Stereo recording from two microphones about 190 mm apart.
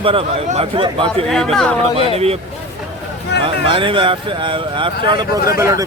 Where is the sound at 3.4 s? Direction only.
25° right (ahead or behind).